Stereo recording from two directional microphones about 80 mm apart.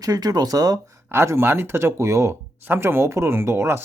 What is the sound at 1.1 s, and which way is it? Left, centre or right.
Speech, right.